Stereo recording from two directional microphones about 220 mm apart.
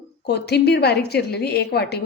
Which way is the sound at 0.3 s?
50° left (ahead or behind).